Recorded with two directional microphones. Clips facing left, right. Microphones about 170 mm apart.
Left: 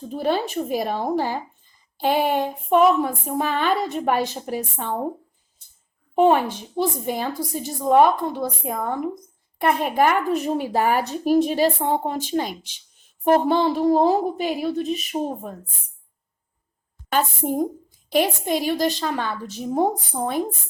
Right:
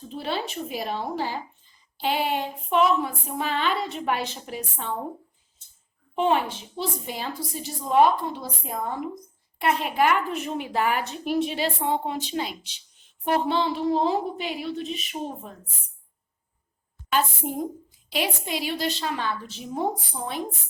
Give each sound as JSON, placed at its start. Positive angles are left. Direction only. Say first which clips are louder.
{"t": 0.1, "sound": "speech", "louder": "left 7 dB", "side_deg": 45}
{"t": 6.1, "sound": "speech", "louder": "left 6 dB", "side_deg": 50}
{"t": 17.1, "sound": "speech", "louder": "left 3 dB", "side_deg": 45}